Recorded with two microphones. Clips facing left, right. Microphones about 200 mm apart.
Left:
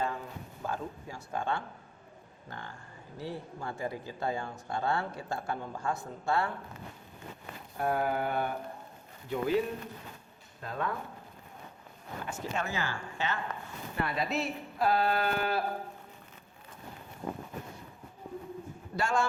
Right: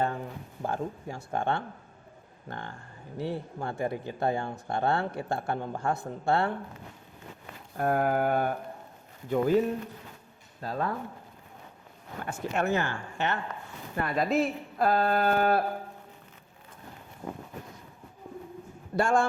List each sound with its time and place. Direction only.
0.7 s speech: 55° right (ahead or behind)
7.8 s speech: 50° right (ahead or behind)
12.2 s speech: 60° right (ahead or behind)
13.9 s speech: 45° right (ahead or behind)
18.9 s speech: 50° right (ahead or behind)